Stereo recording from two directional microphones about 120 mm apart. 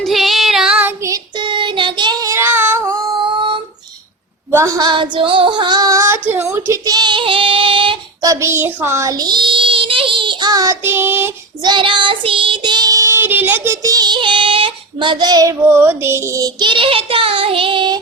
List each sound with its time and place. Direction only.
0.0 s child singing: centre (ahead or behind)
1.4 s child singing: 45° right (ahead or behind)
2.3 s a sound: 20° right (ahead or behind)
4.5 s a woman's voice: 25° right (ahead or behind)
4.9 s female singing: 40° right (ahead or behind); by 6.1 s 25° right (ahead or behind)
6.3 s a woman's voice: 20° right (ahead or behind)
6.9 s child singing: 40° right (ahead or behind)
8.2 s child singing: 25° right (ahead or behind)
11.6 s child singing: 40° right (ahead or behind); by 13.7 s 15° right (ahead or behind)
13.8 s child singing: 35° right (ahead or behind)
15.7 s child singing: 20° right (ahead or behind); by 18.0 s 40° right (ahead or behind)